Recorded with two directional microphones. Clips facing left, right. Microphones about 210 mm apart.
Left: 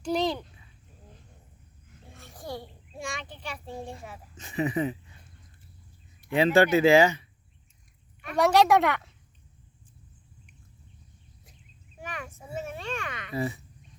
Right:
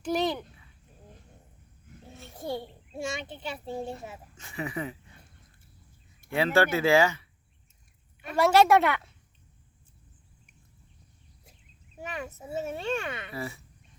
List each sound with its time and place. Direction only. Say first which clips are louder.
0.0 s a sound: left 1 dB; 5° right (ahead or behind)
2.3 s a sound: right 4 dB; 25° right (ahead or behind)
4.4 s speech: left 7 dB; 20° left (ahead or behind)
6.3 s speech: left 4 dB; 20° left (ahead or behind)
8.4 s a woman's voice: even; centre (ahead or behind)
11.9 s a child's voice: right 3 dB; 25° right (ahead or behind)
13.3 s speech: left 11 dB; 20° left (ahead or behind)